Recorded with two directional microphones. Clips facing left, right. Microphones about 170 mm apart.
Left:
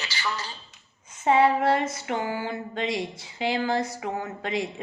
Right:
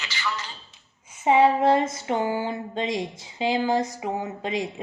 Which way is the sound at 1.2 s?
15° right (ahead or behind).